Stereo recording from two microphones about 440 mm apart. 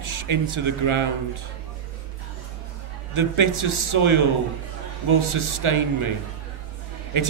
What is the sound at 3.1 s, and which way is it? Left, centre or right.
Speech, right.